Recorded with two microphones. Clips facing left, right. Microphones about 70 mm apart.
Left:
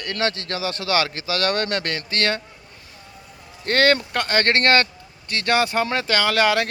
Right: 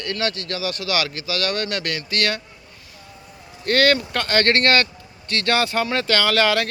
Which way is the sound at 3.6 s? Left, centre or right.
Left.